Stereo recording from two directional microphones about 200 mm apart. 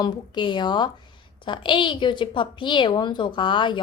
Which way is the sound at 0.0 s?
25° left (ahead or behind).